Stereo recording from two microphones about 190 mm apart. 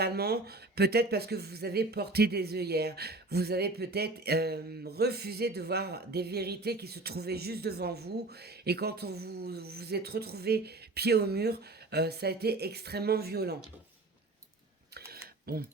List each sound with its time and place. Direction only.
0.0 s speech: 55° right (ahead or behind)
14.9 s typing: 55° right (ahead or behind)